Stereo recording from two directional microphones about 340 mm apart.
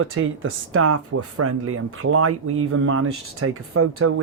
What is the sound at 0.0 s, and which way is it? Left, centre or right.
Speech, right.